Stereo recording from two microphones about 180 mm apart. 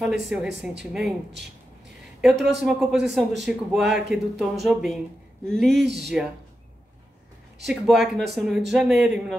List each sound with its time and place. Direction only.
0.0 s speech: 5° right (ahead or behind)
2.2 s speech: centre (ahead or behind)
5.9 s speech: 70° right (ahead or behind)
7.6 s speech: centre (ahead or behind)